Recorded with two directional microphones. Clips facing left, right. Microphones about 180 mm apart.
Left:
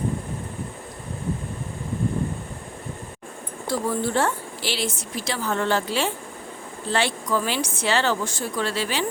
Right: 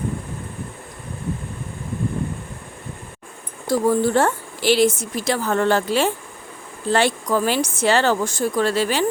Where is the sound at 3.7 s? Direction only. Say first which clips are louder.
Right 7 dB; 45° right (ahead or behind).